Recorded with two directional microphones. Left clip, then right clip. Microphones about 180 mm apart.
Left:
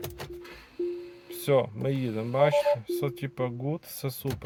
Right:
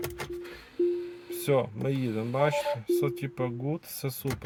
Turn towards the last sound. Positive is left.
turn(degrees=0)  # may be behind; listen again after turning